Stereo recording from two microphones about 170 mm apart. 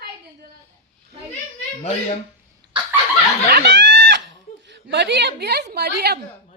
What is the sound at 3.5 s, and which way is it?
Snicker, 80° right.